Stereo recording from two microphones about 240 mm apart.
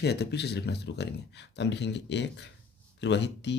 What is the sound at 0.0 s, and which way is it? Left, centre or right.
Speech, left.